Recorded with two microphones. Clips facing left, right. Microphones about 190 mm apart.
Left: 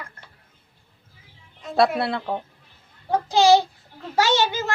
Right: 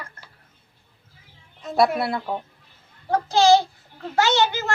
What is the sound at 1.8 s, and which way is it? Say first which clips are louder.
Speech: even; 25° left (ahead or behind).